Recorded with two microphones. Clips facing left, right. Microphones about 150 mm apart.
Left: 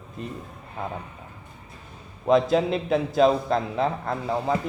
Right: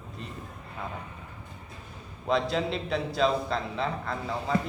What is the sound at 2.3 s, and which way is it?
A man's voice, 45° left (ahead or behind).